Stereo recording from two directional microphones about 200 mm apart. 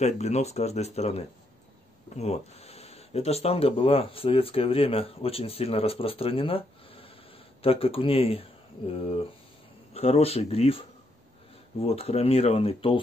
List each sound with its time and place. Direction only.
0.0 s speech: 35° left (ahead or behind)